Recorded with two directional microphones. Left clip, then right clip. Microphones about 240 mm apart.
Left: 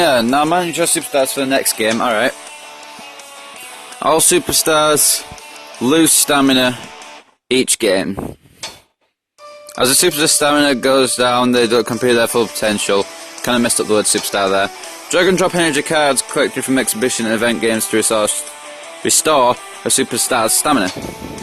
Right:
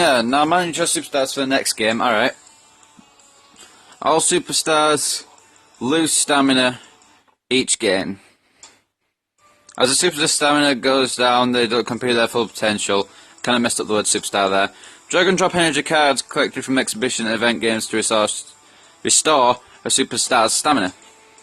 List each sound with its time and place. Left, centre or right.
0.0 s speech: centre
4.0 s speech: centre
9.7 s speech: centre